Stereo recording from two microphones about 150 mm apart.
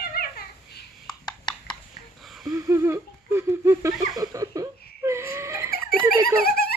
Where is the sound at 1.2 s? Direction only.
30° left (ahead or behind).